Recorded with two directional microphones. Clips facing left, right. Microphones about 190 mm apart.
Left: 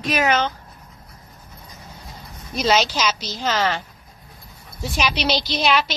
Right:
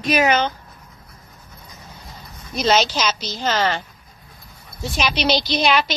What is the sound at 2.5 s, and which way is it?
Speech, 5° left (ahead or behind).